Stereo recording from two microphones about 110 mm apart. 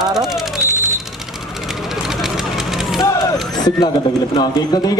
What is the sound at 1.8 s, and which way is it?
Vehicle, 5° right (ahead or behind).